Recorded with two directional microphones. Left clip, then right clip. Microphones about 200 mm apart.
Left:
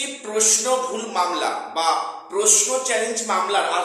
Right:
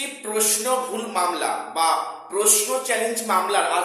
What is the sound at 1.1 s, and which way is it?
A man's voice, 5° right (ahead or behind).